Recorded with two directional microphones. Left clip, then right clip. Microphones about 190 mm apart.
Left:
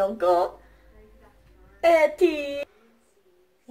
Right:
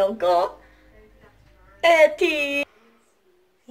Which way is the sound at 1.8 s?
25° left (ahead or behind).